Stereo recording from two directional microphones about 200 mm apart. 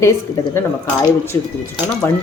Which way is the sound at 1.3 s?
15° left (ahead or behind).